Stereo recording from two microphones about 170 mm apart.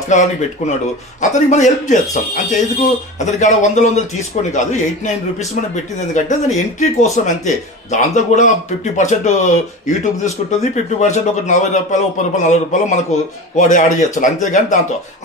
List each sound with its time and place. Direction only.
0.1 s a man's voice: 40° left (ahead or behind)